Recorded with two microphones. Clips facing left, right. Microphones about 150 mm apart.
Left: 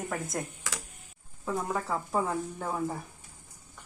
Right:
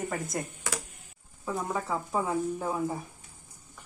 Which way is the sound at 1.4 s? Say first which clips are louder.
Even; centre (ahead or behind).